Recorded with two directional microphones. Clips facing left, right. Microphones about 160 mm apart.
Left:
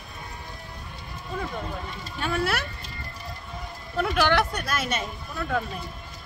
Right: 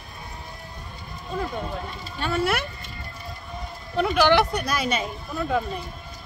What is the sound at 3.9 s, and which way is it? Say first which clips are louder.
Speech: right 4 dB; centre (ahead or behind).